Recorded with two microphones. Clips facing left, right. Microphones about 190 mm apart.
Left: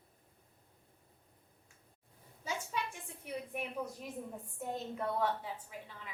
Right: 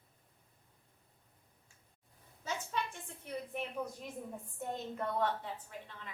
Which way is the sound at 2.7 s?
10° left (ahead or behind).